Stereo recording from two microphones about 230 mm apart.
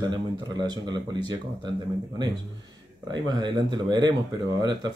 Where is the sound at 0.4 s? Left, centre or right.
Centre.